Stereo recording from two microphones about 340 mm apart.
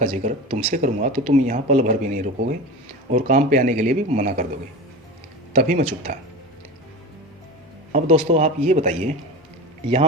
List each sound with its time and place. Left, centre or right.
0.0 s speech: right
5.5 s speech: right
7.9 s speech: centre